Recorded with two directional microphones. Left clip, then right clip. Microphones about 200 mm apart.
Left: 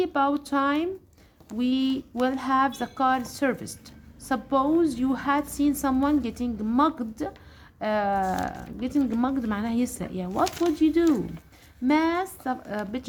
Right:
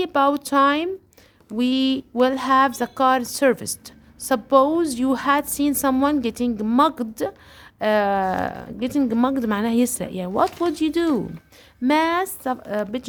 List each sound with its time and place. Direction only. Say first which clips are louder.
0.0 s speech: right 5 dB; 40° right (ahead or behind)